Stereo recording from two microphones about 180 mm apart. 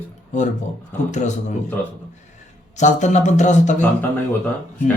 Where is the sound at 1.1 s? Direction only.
40° left (ahead or behind).